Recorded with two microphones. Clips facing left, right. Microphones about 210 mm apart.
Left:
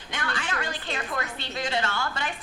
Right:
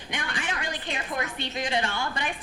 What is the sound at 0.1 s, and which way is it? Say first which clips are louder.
A woman's voice: left 1 dB; 15° right (ahead or behind).